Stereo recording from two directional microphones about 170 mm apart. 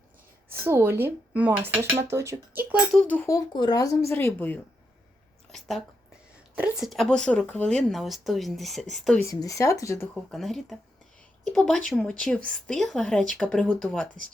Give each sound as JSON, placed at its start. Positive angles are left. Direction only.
{"t": 0.5, "sound": "speech", "side_deg": -15}
{"t": 2.9, "sound": "speech", "side_deg": 5}
{"t": 5.5, "sound": "a sound", "side_deg": 0}
{"t": 6.6, "sound": "speech", "side_deg": 0}
{"t": 9.2, "sound": "speech", "side_deg": 20}
{"t": 10.3, "sound": "speech", "side_deg": 0}